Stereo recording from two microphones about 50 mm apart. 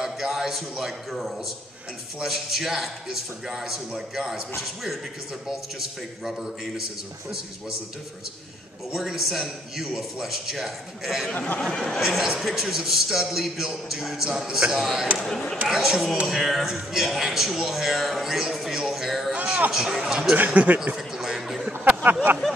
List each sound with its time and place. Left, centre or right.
0.0 s a man's voice: centre
8.9 s a man's voice: centre
11.3 s speech: left
11.7 s speech: centre
12.0 s a man's voice: centre
15.1 s speech: centre
15.7 s a man's voice: centre
20.3 s speech: right
21.2 s a sound: centre
21.7 s a sound: right